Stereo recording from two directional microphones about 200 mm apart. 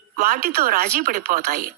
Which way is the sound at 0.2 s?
45° right (ahead or behind).